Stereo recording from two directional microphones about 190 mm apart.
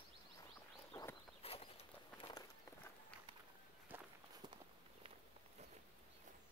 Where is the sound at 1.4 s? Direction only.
30° left (ahead or behind).